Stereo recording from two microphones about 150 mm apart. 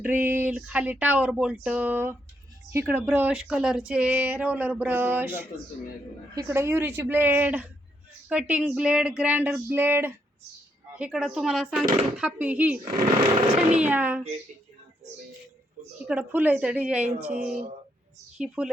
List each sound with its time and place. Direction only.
0.0 s speech: 15° right (ahead or behind)
13.8 s speech: 10° right (ahead or behind)
16.0 s speech: 10° right (ahead or behind)
17.4 s speech: 55° right (ahead or behind)
18.3 s speech: 5° right (ahead or behind)